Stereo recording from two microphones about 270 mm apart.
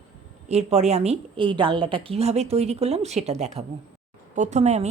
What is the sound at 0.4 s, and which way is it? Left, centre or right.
A woman's voice, right.